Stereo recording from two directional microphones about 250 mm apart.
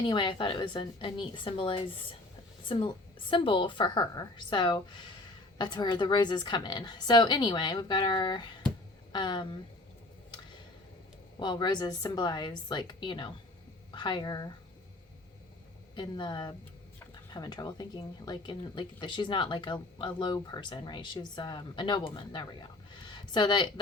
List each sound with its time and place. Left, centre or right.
0.0 s a woman's voice: centre
11.3 s speech: centre
16.0 s speech: centre
22.9 s a sound: centre